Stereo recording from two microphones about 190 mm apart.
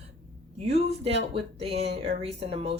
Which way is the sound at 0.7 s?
30° right (ahead or behind).